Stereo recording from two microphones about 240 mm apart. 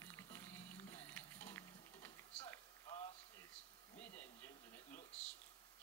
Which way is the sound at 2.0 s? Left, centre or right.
Centre.